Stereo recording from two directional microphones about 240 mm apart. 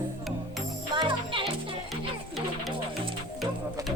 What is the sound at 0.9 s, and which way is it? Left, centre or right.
Music, centre.